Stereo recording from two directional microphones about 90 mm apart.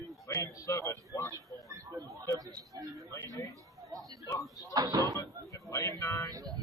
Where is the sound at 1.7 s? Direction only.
40° right (ahead or behind).